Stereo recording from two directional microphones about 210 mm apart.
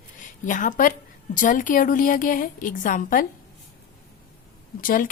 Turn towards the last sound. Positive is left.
turn(degrees=40)  # may be behind; listen again after turning